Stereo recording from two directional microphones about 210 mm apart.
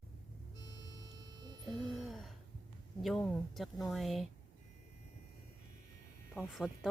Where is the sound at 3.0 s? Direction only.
Centre (ahead or behind).